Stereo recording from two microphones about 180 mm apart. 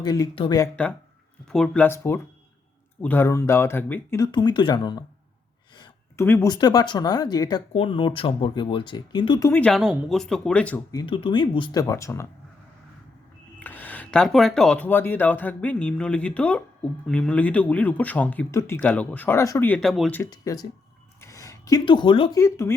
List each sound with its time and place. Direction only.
0.0 s speech: 20° left (ahead or behind)
1.5 s speech: 5° left (ahead or behind)
4.2 s speech: 25° left (ahead or behind)
5.7 s a sound: 25° left (ahead or behind)
6.2 s speech: 10° left (ahead or behind)
6.5 s speech: 25° left (ahead or behind)
9.5 s speech: 5° left (ahead or behind)
10.9 s speech: 30° left (ahead or behind)
13.6 s speech: 10° left (ahead or behind)
20.3 s speech: 20° left (ahead or behind)
21.2 s a sound: 15° left (ahead or behind)
22.4 s speech: 15° left (ahead or behind)